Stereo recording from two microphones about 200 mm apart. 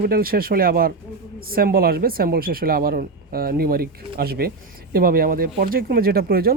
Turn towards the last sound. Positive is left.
turn(degrees=-50)  # may be behind; listen again after turning